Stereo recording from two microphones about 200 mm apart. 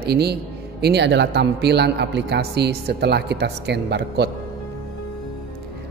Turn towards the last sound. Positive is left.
turn(degrees=-55)  # may be behind; listen again after turning